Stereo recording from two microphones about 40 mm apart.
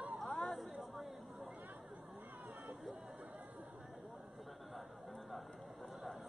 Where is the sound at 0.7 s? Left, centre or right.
Centre.